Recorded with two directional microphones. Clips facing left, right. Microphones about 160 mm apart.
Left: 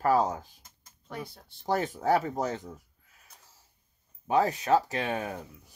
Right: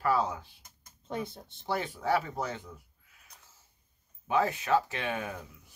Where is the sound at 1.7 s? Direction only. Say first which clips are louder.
Left 4 dB; 40° left (ahead or behind).